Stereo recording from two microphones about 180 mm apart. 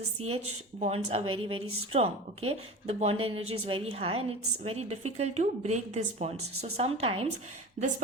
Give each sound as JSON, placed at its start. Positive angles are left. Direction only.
{"t": 0.2, "sound": "speech", "side_deg": -35}